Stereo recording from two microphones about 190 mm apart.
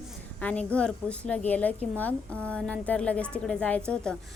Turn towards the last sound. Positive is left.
turn(degrees=5)  # may be behind; listen again after turning